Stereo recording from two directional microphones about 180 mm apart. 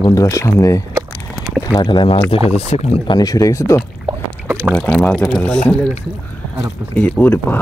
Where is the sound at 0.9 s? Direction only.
5° right (ahead or behind).